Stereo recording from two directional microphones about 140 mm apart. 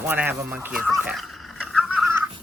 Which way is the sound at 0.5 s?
10° right (ahead or behind).